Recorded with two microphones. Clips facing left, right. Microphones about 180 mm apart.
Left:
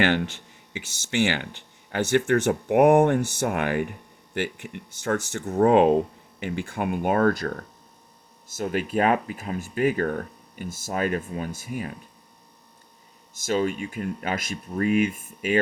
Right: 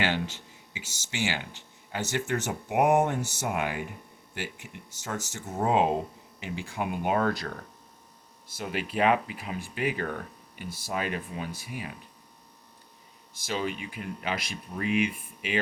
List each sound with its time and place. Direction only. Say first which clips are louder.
0.0 s speech: left 6 dB; 60° left (ahead or behind)
13.3 s speech: left 7 dB; 45° left (ahead or behind)